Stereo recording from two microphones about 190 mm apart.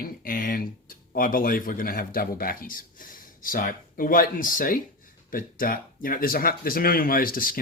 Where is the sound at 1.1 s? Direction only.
45° left (ahead or behind).